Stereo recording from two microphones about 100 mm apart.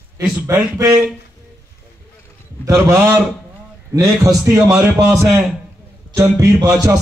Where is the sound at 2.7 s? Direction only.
25° right (ahead or behind).